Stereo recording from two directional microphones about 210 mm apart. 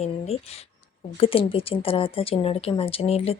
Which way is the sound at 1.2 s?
25° left (ahead or behind).